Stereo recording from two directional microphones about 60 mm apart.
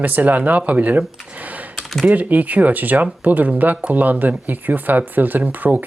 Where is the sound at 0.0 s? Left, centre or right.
Right.